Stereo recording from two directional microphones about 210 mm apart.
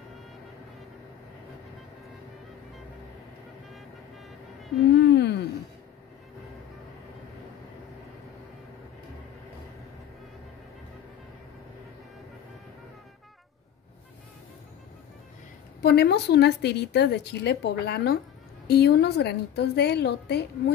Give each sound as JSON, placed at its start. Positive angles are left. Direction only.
{"t": 4.6, "sound": "speech", "side_deg": 0}
{"t": 5.0, "sound": "a sound", "side_deg": 55}
{"t": 15.8, "sound": "speech", "side_deg": 50}